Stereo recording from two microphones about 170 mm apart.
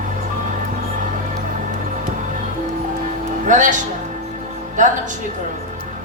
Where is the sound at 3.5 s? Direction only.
45° right (ahead or behind).